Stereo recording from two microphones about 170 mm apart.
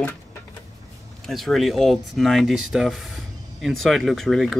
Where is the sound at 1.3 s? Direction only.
Centre (ahead or behind).